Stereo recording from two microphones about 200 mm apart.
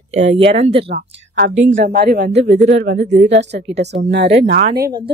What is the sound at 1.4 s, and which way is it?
A woman's voice, 50° right (ahead or behind).